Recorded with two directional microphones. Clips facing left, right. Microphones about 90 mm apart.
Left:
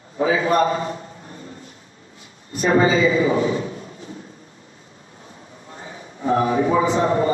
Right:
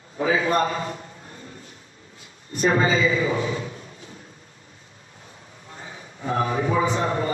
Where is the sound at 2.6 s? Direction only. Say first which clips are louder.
Left 4 dB; 30° left (ahead or behind).